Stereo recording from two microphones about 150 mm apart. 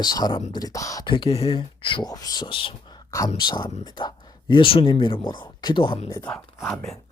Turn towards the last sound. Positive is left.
turn(degrees=0)  # may be behind; listen again after turning